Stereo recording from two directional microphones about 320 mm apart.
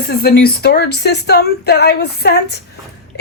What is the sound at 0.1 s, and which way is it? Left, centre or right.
Speech, left.